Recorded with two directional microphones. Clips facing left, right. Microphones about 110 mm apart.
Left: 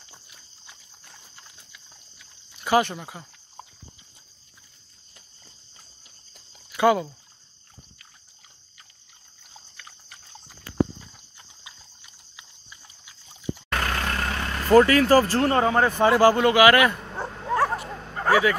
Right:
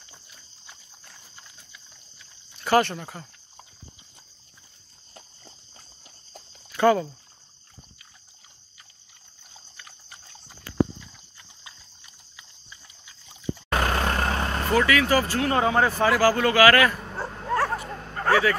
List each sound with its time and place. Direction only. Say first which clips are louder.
2.6 s speech: even; 10° left (ahead or behind)
6.7 s speech: even; 10° left (ahead or behind)
11.6 s pig: right 1 dB; 10° left (ahead or behind)
13.7 s vehicle: right 4 dB; 30° right (ahead or behind)
14.7 s speech: left 6 dB; 40° left (ahead or behind)
15.6 s speech: left 1 dB; 10° right (ahead or behind)
16.0 s speech: left 6 dB; 25° left (ahead or behind)
17.3 s bow-wow: left 2 dB; centre (ahead or behind)